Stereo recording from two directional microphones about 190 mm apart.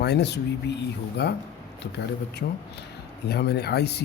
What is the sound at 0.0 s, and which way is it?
Speech, 60° left (ahead or behind).